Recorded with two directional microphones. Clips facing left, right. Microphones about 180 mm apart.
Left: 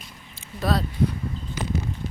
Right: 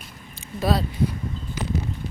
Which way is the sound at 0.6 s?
5° right (ahead or behind).